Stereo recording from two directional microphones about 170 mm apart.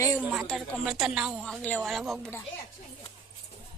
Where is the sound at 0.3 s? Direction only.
Centre (ahead or behind).